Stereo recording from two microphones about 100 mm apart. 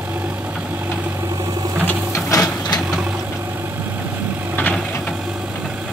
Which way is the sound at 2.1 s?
35° left (ahead or behind).